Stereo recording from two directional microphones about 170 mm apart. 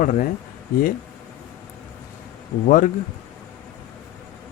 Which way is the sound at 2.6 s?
50° left (ahead or behind).